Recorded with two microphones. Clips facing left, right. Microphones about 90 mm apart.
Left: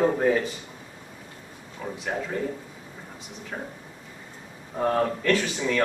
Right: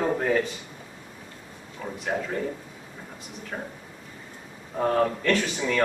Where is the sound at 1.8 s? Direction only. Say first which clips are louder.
Left 1 dB; 5° left (ahead or behind).